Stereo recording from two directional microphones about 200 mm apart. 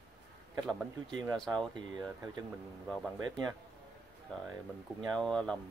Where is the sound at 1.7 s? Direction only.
20° right (ahead or behind).